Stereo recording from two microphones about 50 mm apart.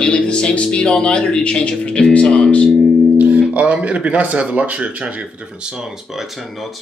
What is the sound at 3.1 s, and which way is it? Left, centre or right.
Guitar, right.